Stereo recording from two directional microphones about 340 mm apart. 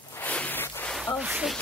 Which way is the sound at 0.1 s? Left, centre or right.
Centre.